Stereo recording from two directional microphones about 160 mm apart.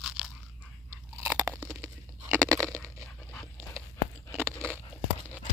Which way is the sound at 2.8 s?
10° left (ahead or behind).